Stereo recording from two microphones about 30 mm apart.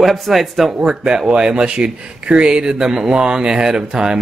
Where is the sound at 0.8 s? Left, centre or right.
Right.